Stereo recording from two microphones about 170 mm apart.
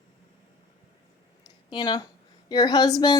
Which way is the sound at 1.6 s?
25° left (ahead or behind).